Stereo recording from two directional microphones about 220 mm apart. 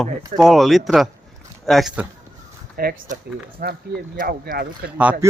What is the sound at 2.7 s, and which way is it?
Speech, 40° right (ahead or behind).